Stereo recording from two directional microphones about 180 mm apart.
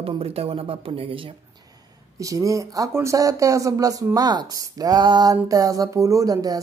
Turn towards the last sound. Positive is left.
turn(degrees=-20)  # may be behind; listen again after turning